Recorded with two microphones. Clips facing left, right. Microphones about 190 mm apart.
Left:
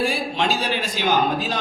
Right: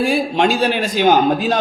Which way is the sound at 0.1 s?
55° right (ahead or behind).